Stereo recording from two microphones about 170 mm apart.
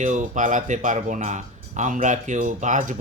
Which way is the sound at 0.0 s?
45° right (ahead or behind).